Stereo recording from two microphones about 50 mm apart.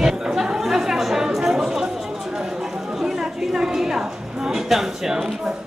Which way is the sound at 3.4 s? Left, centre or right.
Centre.